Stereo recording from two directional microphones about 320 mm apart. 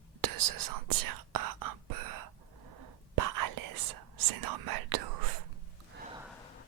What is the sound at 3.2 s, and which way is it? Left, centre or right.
Whispering, right.